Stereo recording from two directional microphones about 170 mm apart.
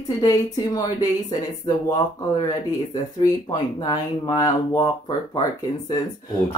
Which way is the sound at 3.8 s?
25° left (ahead or behind).